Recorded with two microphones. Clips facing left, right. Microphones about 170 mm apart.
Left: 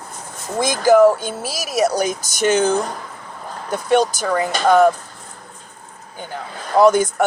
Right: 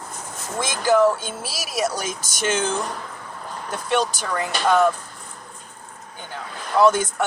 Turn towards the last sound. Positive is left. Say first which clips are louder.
# left 4 dB
turn(degrees=40)  # may be behind; listen again after turning